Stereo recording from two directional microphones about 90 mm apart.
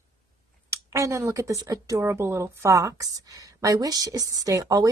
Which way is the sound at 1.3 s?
35° right (ahead or behind).